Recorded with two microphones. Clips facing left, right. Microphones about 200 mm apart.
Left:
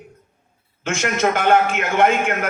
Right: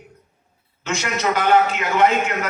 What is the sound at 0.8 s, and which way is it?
A man's voice, 50° left (ahead or behind).